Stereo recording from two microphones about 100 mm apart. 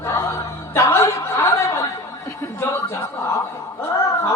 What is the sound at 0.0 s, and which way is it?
Chuckle, 25° left (ahead or behind).